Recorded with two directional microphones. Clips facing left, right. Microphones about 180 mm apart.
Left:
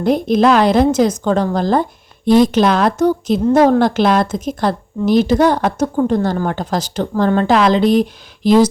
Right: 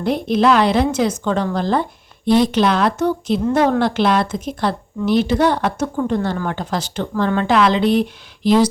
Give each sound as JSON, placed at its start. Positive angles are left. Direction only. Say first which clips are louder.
{"t": 0.0, "sound": "a woman's voice", "louder": "left 3 dB", "side_deg": 45}